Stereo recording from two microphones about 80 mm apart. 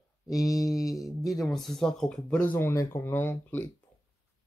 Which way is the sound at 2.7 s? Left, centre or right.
Left.